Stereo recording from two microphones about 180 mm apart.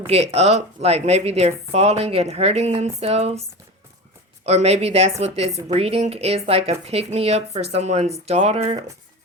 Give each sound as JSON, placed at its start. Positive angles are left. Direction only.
{"t": 0.1, "sound": "speech", "side_deg": -35}
{"t": 4.4, "sound": "speech", "side_deg": -35}